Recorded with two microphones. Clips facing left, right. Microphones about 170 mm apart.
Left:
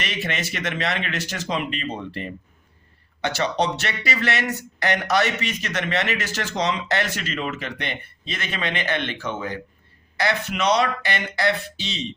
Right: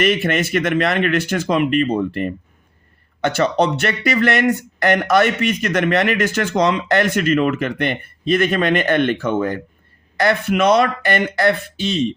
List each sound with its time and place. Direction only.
0.0 s speech: 50° right (ahead or behind)